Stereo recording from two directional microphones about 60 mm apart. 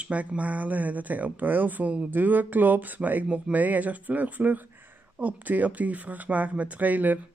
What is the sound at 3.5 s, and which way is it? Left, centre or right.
Speech, right.